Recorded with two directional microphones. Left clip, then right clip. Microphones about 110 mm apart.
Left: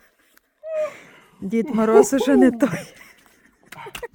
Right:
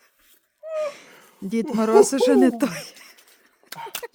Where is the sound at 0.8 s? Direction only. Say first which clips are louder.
Left 2 dB; 5° left (ahead or behind).